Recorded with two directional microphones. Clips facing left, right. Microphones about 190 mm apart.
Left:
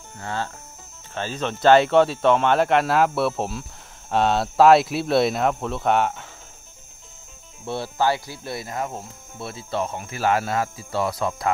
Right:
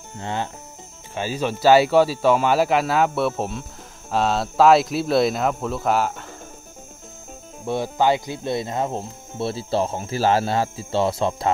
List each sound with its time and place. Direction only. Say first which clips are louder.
0.2 s speech: right 2 dB; 20° right (ahead or behind); by 6.2 s centre (ahead or behind)
7.6 s speech: right 3 dB; 15° right (ahead or behind)